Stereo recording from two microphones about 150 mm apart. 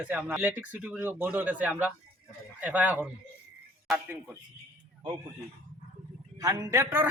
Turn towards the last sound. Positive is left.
turn(degrees=-15)  # may be behind; listen again after turning